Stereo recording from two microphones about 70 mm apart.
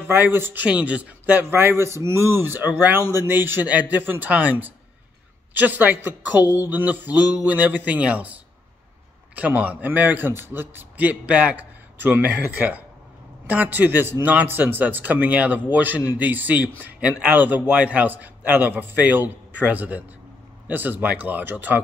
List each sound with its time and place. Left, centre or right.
0.0 s a man's voice: right
0.7 s a man's voice: centre